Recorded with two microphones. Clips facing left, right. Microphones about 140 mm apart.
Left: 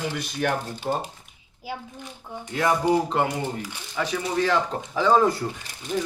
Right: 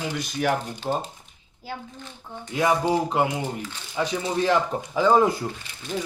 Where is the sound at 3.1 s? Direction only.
10° right (ahead or behind).